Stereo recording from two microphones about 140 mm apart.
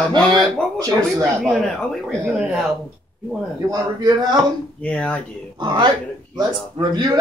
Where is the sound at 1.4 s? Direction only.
Centre (ahead or behind).